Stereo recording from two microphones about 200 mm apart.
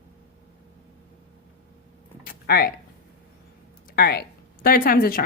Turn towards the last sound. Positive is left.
turn(degrees=45)  # may be behind; listen again after turning